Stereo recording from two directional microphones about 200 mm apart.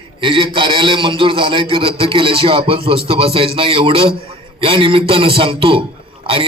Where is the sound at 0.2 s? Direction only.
25° right (ahead or behind).